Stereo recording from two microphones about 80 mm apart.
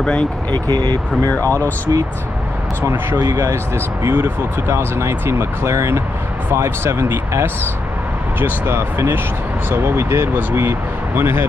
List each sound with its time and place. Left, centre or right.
0.0 s speech: centre
0.5 s speech: right
1.4 s speech: right
3.2 s speech: right
3.7 s speech: right